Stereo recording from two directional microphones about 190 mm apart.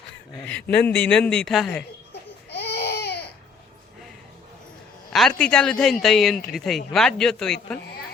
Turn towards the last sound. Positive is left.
turn(degrees=5)  # may be behind; listen again after turning